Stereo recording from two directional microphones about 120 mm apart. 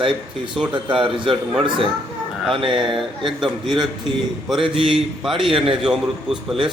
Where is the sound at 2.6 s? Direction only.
45° right (ahead or behind).